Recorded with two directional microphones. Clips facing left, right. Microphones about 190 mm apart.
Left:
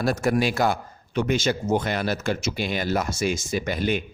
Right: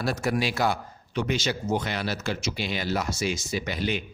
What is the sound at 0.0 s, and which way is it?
A man's voice, 50° left (ahead or behind).